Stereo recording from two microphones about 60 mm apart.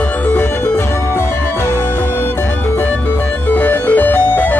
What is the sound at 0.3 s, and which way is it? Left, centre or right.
Music, left.